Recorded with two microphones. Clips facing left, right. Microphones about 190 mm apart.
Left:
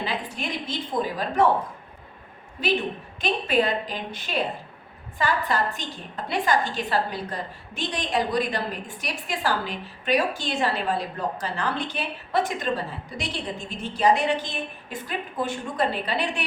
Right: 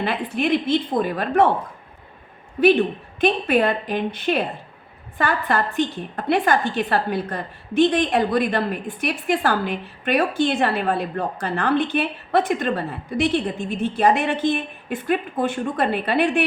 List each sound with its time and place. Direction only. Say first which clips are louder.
0.0 s a woman's voice: right 7 dB; 60° right (ahead or behind)
3.2 s a woman's voice: right 5 dB; 55° right (ahead or behind)